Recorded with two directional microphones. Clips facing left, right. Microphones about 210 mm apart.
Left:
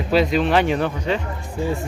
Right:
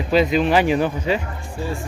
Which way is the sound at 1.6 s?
20° left (ahead or behind).